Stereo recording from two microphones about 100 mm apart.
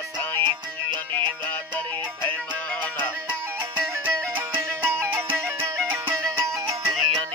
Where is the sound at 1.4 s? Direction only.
20° left (ahead or behind).